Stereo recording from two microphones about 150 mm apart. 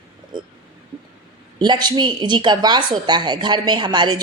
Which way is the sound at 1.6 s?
30° right (ahead or behind).